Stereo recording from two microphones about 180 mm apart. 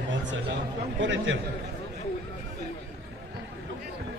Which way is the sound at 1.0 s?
90° right.